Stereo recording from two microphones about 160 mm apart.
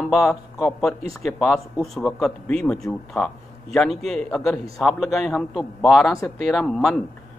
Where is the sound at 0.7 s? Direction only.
Centre (ahead or behind).